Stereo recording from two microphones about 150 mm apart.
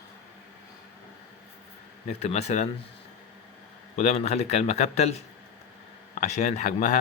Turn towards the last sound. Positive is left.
turn(degrees=55)  # may be behind; listen again after turning